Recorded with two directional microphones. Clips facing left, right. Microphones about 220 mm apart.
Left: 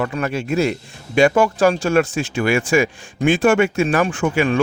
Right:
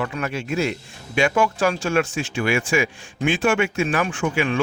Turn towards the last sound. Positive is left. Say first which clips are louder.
# left 4 dB
turn(degrees=45)  # may be behind; listen again after turning